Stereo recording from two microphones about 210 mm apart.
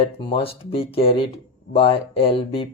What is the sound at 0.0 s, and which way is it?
Speech, 25° left (ahead or behind).